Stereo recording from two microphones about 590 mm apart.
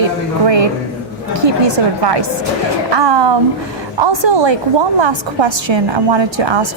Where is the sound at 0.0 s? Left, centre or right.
Right.